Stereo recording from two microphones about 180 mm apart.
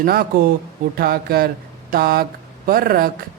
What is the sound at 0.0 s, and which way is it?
Speech, 55° right (ahead or behind).